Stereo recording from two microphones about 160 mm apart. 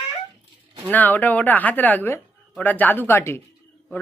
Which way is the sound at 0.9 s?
10° left (ahead or behind).